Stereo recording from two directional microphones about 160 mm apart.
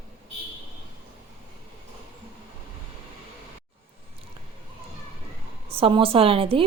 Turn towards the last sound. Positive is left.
turn(degrees=-35)  # may be behind; listen again after turning